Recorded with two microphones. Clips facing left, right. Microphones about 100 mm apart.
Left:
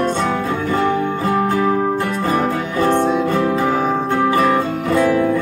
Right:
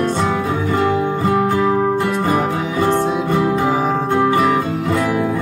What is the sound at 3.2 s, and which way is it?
Music, 15° right (ahead or behind).